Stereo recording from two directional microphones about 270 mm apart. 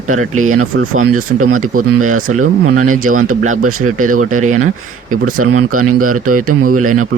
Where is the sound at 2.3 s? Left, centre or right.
Right.